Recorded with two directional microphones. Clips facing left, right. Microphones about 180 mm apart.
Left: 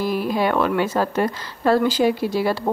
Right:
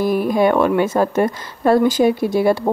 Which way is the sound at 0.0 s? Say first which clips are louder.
Right 5 dB; 50° right (ahead or behind).